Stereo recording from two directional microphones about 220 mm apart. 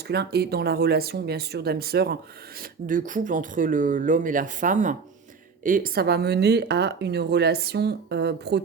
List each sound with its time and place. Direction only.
0.1 s speech: 45° right (ahead or behind)